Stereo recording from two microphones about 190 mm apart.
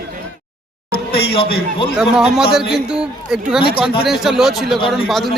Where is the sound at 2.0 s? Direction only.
5° right (ahead or behind).